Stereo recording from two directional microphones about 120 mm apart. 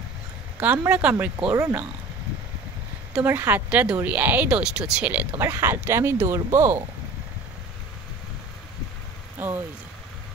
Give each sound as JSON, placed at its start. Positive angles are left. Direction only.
{"t": 0.6, "sound": "speech", "side_deg": -15}
{"t": 3.3, "sound": "speech", "side_deg": -15}
{"t": 9.4, "sound": "speech", "side_deg": -15}